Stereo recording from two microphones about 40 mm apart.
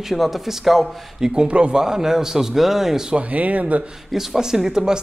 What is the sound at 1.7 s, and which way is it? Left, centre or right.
Speech, centre.